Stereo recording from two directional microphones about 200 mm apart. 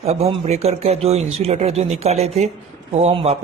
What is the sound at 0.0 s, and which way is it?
A man's voice, 30° right (ahead or behind).